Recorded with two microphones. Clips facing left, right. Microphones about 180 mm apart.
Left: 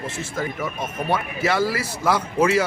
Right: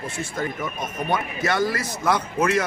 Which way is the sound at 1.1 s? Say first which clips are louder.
Left 1 dB; 5° left (ahead or behind).